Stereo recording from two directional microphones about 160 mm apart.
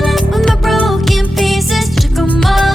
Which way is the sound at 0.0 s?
Centre (ahead or behind).